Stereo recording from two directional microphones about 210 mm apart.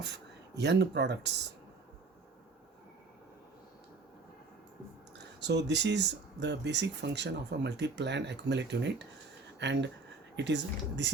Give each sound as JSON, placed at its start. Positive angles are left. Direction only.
{"t": 0.0, "sound": "speech", "side_deg": -55}
{"t": 5.1, "sound": "speech", "side_deg": -55}